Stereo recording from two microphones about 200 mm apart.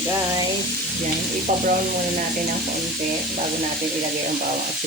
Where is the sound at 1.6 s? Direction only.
40° right (ahead or behind).